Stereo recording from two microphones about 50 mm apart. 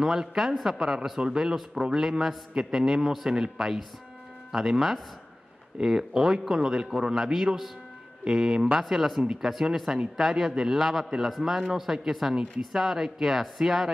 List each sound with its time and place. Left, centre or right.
0.0 s a man's voice: centre
8.2 s a man's voice: centre